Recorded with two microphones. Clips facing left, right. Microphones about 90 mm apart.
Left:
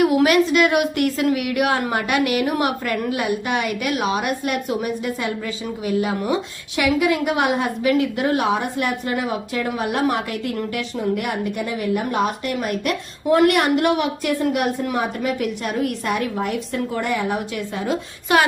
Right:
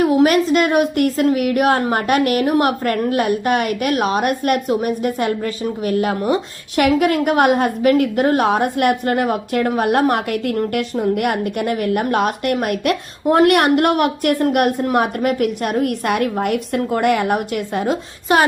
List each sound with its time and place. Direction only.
0.0 s a woman's voice: 35° right (ahead or behind); by 17.9 s 50° right (ahead or behind)
18.3 s speech: 35° right (ahead or behind)